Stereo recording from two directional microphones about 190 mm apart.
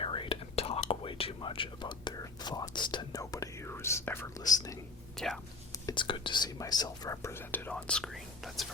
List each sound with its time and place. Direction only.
0.0 s whispering: 25° left (ahead or behind)
5.1 s speech: centre (ahead or behind)
5.7 s speech: 20° left (ahead or behind); by 8.6 s centre (ahead or behind)